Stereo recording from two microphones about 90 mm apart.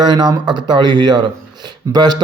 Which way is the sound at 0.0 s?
50° right (ahead or behind).